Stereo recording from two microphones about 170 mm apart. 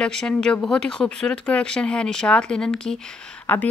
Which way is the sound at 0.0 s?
5° left (ahead or behind).